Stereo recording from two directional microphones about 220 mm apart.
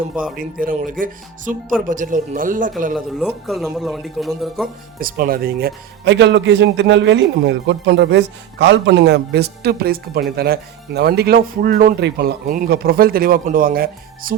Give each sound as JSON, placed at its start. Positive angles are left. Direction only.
{"t": 0.3, "sound": "speech", "side_deg": -40}
{"t": 3.2, "sound": "speech", "side_deg": 0}
{"t": 4.9, "sound": "speech", "side_deg": -40}